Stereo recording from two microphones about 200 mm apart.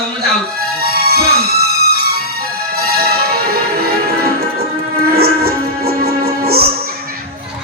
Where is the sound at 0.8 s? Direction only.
50° right (ahead or behind).